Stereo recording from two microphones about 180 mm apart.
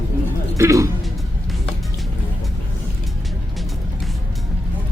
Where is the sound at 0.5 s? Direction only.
15° right (ahead or behind).